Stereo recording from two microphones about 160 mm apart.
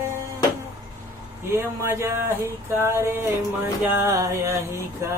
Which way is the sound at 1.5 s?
15° right (ahead or behind).